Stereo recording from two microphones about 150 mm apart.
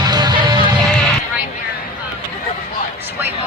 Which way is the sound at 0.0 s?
30° right (ahead or behind).